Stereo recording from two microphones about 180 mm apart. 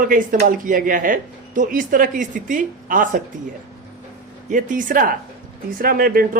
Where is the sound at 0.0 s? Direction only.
50° right (ahead or behind).